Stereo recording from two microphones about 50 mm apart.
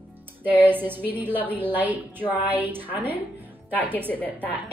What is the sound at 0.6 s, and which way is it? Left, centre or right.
A woman's voice, right.